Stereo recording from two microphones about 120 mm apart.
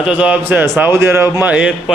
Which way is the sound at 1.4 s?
10° right (ahead or behind).